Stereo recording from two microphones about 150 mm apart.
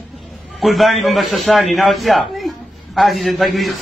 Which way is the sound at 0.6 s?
Centre (ahead or behind).